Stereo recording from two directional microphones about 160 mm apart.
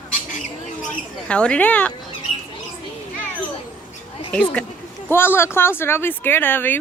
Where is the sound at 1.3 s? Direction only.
5° left (ahead or behind).